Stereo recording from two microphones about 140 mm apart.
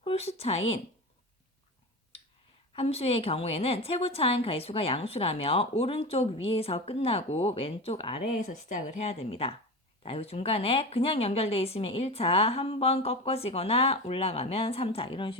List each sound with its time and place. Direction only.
0.0 s speech: 45° left (ahead or behind)
2.7 s a woman's voice: 45° left (ahead or behind)
8.4 s a woman's voice: 55° left (ahead or behind); by 15.4 s 40° left (ahead or behind)